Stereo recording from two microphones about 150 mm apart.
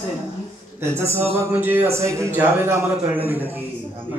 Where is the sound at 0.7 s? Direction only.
15° right (ahead or behind).